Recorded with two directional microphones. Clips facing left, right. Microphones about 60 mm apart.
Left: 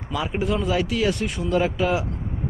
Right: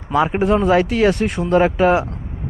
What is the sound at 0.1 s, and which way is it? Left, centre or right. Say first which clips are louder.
Speech: right 9 dB; right.